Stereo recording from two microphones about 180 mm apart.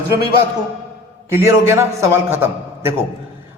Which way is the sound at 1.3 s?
15° right (ahead or behind).